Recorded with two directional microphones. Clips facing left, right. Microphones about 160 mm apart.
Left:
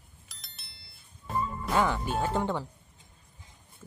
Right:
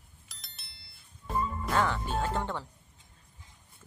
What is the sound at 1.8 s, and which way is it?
Speech, 10° left (ahead or behind).